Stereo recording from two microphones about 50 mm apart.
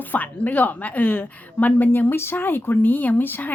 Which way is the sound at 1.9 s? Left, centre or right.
Left.